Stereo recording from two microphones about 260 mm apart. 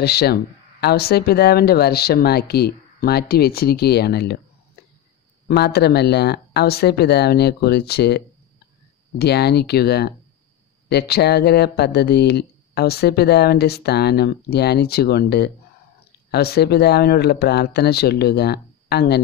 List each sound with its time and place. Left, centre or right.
0.0 s speech: left
4.8 s a sound: left
5.5 s speech: left
9.2 s speech: left